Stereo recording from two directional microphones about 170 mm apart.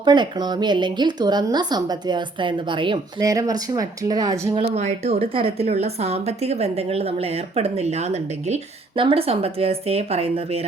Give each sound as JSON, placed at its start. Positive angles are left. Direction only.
{"t": 0.0, "sound": "speech", "side_deg": -25}
{"t": 4.7, "sound": "a woman's voice", "side_deg": -40}